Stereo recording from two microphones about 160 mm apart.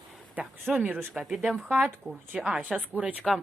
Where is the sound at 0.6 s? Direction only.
10° right (ahead or behind).